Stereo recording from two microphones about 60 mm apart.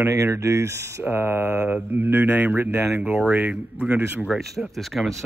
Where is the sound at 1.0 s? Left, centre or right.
Right.